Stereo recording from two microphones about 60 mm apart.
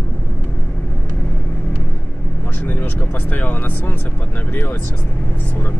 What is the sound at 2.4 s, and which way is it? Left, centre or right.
Speech, left.